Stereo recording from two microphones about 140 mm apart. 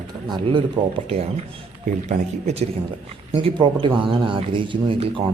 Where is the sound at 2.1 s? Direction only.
55° right (ahead or behind).